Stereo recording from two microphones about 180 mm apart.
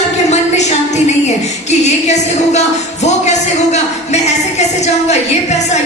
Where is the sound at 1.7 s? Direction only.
40° left (ahead or behind).